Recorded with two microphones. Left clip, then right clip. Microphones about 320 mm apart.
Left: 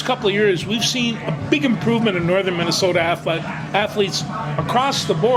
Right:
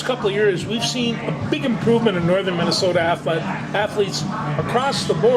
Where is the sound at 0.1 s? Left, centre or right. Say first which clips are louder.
Left 1 dB; left.